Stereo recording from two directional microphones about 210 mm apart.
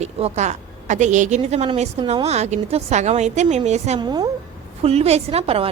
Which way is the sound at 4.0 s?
20° right (ahead or behind).